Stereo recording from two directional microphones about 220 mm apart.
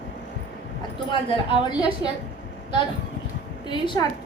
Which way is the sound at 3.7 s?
20° left (ahead or behind).